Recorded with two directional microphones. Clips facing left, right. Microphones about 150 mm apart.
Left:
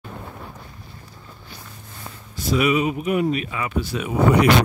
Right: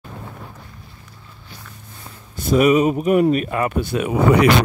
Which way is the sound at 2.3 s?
50° right (ahead or behind).